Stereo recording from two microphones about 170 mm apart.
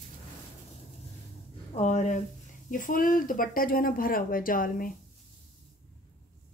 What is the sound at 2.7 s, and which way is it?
Speech, 50° left (ahead or behind).